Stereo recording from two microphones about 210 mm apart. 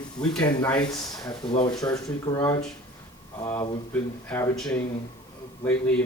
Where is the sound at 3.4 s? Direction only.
10° left (ahead or behind).